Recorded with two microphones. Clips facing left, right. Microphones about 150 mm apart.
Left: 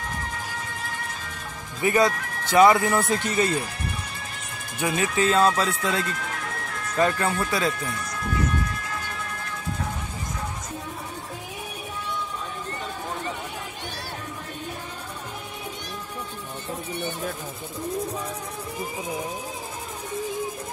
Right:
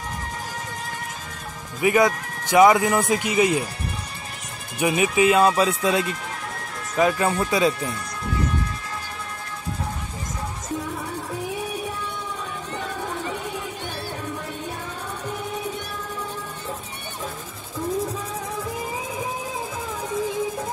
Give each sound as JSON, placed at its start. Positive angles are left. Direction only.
{"t": 1.8, "sound": "speech", "side_deg": -15}
{"t": 4.7, "sound": "speech", "side_deg": -15}
{"t": 7.2, "sound": "speech", "side_deg": -20}